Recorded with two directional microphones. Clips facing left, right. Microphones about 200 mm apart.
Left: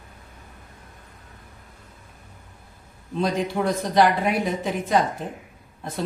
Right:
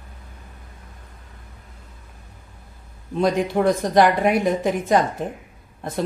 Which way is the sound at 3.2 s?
50° right (ahead or behind).